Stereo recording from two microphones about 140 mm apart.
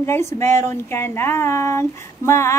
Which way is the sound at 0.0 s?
20° left (ahead or behind).